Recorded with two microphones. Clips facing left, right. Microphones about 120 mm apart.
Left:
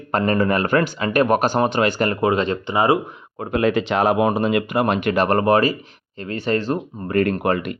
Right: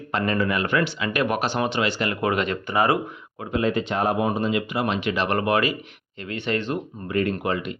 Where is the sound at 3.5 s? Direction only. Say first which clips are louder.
Left 4 dB; 85° left.